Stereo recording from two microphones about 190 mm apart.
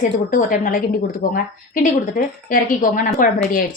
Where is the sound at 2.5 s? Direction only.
45° left (ahead or behind).